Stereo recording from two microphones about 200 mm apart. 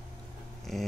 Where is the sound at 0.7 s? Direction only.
Centre (ahead or behind).